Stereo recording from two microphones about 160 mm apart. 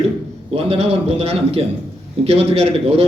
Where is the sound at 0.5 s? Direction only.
40° right (ahead or behind).